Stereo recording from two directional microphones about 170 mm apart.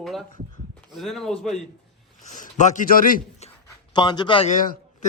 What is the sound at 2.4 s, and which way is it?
Speech, 50° left (ahead or behind).